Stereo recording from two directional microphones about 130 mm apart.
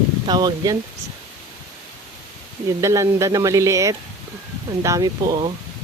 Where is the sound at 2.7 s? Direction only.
25° right (ahead or behind).